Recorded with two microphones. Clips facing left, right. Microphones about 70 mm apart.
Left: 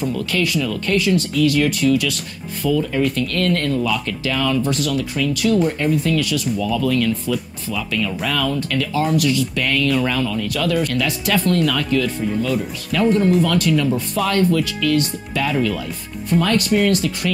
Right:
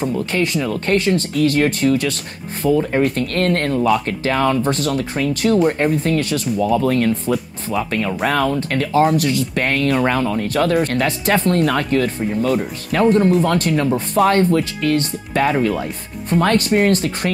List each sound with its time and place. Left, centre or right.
0.0 s speech: right
5.6 s speech: right